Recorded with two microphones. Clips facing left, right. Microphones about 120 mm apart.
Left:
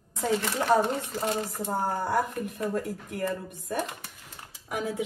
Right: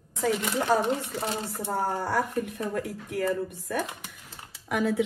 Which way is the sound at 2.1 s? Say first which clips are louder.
Even; 75° right (ahead or behind).